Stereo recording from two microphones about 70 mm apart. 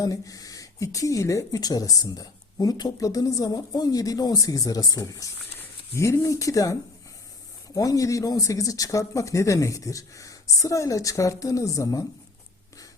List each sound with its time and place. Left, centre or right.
0.0 s speech: left